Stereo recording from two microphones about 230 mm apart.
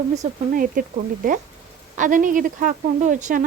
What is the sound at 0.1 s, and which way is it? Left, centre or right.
Speech, right.